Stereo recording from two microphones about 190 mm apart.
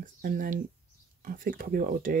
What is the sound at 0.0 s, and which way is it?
Speech, 45° right (ahead or behind).